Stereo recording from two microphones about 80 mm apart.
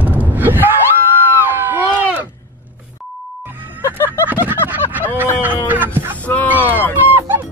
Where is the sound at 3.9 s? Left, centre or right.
Left.